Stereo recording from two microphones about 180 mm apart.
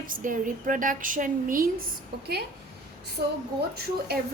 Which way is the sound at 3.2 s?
60° right (ahead or behind).